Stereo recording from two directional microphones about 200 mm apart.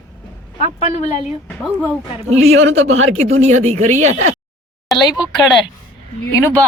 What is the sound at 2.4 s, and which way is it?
Speech, 85° right.